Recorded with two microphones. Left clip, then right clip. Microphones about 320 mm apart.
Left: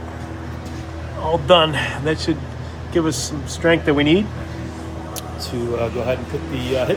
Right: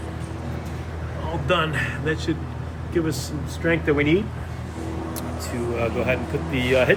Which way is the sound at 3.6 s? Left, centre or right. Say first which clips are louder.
Left 5 dB; left.